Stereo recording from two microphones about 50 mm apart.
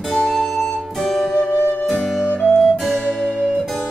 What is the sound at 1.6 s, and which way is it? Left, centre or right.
Music, left.